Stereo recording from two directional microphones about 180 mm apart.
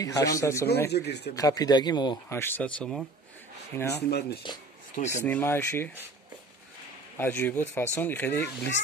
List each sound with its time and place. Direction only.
0.0 s speech: 20° left (ahead or behind)
0.8 s speech: 65° left (ahead or behind)
1.3 s speech: 20° left (ahead or behind); by 3.1 s 5° left (ahead or behind)
3.9 s speech: 65° left (ahead or behind)
4.9 s speech: 45° left (ahead or behind)
5.2 s speech: 10° left (ahead or behind)
7.2 s speech: 10° left (ahead or behind)